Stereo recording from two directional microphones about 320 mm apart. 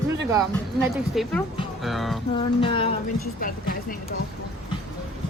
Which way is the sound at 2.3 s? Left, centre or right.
Centre.